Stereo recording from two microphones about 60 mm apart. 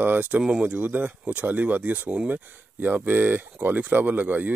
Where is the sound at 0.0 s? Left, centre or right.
Right.